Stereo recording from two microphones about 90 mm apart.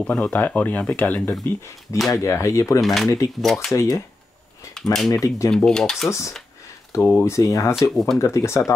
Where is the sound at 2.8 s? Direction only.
Centre (ahead or behind).